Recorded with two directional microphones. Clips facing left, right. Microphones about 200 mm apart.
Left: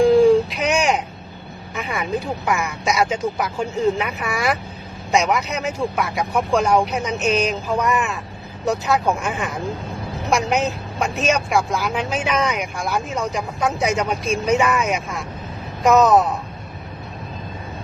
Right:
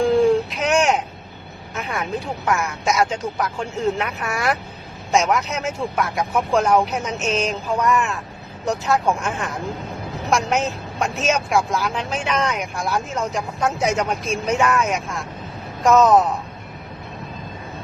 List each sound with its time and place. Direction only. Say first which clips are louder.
0.0 s baby cry: left 3 dB; centre (ahead or behind)
1.7 s vehicle: left 1 dB; centre (ahead or behind)
2.5 s speech: right 1 dB; centre (ahead or behind)